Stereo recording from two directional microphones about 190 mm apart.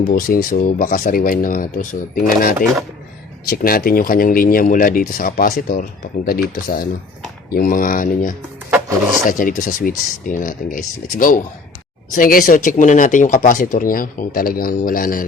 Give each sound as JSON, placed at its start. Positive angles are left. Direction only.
{"t": 0.1, "sound": "speech", "side_deg": 45}